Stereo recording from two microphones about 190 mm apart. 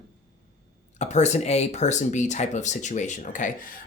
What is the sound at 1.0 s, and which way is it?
Speech, 35° left (ahead or behind).